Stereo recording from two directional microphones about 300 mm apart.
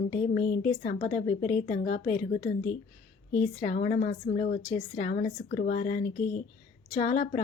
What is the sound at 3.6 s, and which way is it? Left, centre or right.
A woman's voice, left.